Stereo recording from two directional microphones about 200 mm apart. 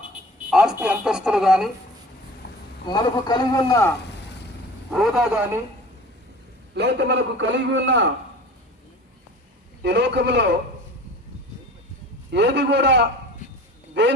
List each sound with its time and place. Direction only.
0.5 s speech: centre (ahead or behind)
2.4 s a sound: 55° left (ahead or behind)
2.8 s a man's voice: 20° left (ahead or behind)
4.9 s speech: centre (ahead or behind)
6.7 s a man's voice: 60° right (ahead or behind)
9.8 s a man's voice: 60° right (ahead or behind)
12.3 s a man's voice: 60° right (ahead or behind)